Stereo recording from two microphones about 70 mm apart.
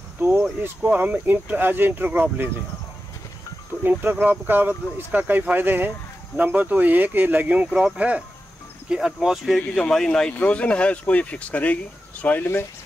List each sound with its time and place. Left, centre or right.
0.6 s speech: right
3.8 s speech: right; by 9.6 s centre
9.8 s speech: centre